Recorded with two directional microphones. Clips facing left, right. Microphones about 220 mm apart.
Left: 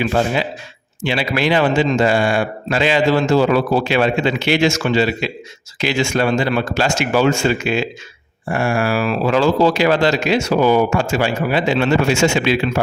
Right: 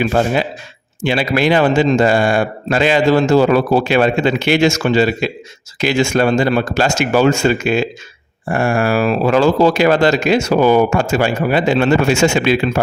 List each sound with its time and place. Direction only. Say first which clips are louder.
0.0 s speech: right 2 dB; 45° right (ahead or behind)